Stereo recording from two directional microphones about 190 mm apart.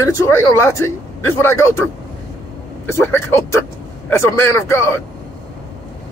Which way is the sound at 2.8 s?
15° left (ahead or behind).